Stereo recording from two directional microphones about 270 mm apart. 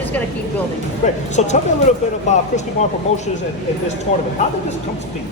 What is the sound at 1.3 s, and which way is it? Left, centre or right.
Speech, left.